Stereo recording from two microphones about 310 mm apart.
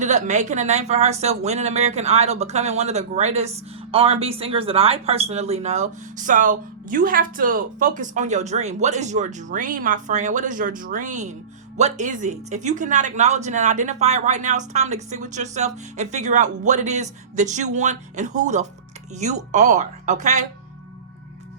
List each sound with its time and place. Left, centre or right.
0.0 s speech: right